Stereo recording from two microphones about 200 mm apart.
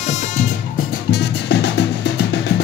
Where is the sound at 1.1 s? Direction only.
60° left (ahead or behind).